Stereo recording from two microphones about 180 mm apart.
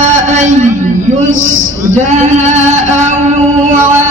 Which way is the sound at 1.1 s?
45° right (ahead or behind).